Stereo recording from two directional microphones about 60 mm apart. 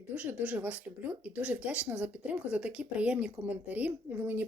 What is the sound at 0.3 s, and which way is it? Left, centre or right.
Speech, right.